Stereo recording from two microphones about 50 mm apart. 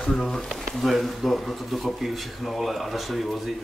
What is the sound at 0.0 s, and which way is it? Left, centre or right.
Speech, centre.